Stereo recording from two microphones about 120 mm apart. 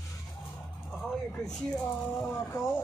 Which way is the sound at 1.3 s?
5° left (ahead or behind).